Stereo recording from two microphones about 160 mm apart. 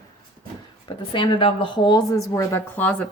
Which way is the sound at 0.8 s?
30° left (ahead or behind).